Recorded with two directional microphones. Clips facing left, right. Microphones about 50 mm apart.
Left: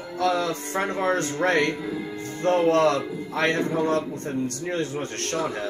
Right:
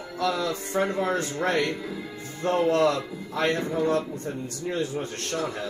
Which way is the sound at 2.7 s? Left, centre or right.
Left.